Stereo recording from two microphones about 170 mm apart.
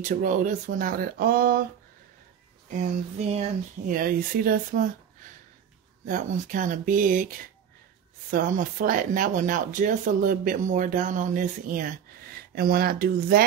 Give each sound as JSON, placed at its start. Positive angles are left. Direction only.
{"t": 0.0, "sound": "speech", "side_deg": -50}
{"t": 2.7, "sound": "a sound", "side_deg": -40}
{"t": 3.9, "sound": "speech", "side_deg": -55}
{"t": 6.0, "sound": "speech", "side_deg": -50}